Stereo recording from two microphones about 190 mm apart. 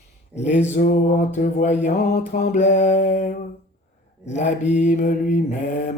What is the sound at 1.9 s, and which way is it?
Mantra, 50° left (ahead or behind).